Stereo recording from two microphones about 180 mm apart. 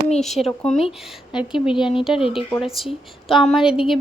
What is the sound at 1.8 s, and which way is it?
Speech, 30° left (ahead or behind).